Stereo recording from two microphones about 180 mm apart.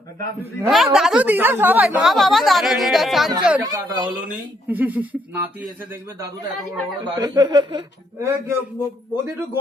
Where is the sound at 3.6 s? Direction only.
20° right (ahead or behind).